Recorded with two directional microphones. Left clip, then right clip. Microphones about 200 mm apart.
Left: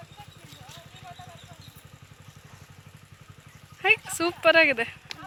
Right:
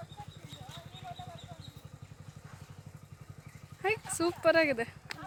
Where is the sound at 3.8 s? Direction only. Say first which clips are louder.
Left 10 dB; 10° left (ahead or behind).